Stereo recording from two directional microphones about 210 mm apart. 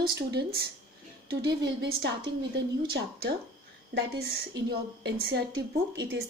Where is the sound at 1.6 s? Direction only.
50° right (ahead or behind).